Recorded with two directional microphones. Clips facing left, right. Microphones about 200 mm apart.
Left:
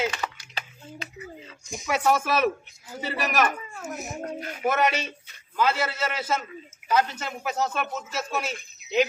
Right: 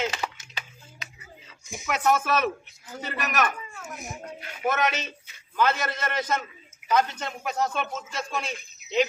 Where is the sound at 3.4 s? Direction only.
40° left (ahead or behind).